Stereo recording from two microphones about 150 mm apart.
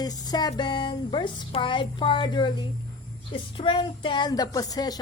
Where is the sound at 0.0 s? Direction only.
25° left (ahead or behind).